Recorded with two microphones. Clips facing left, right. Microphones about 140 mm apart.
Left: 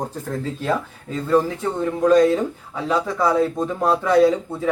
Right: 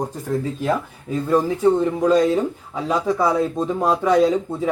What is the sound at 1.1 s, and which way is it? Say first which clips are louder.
Speech: even; 15° right (ahead or behind).